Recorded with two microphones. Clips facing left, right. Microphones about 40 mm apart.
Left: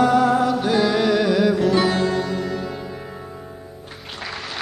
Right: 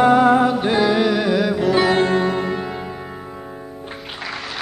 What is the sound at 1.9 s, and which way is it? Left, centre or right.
Music, right.